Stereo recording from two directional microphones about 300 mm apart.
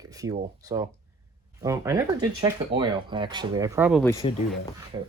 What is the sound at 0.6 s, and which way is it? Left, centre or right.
Speech, centre.